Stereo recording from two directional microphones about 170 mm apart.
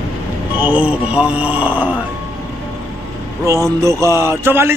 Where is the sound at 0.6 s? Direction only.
10° right (ahead or behind).